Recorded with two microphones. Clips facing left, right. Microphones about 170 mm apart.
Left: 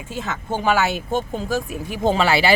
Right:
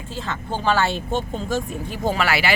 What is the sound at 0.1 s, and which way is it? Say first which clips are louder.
Speech: left 2 dB; 10° left (ahead or behind).